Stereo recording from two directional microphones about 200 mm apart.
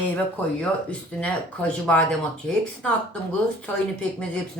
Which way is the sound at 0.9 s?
5° left (ahead or behind).